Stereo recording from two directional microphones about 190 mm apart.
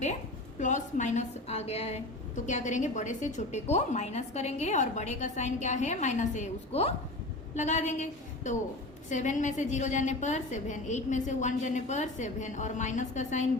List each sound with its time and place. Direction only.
0.6 s a woman's voice: 40° left (ahead or behind)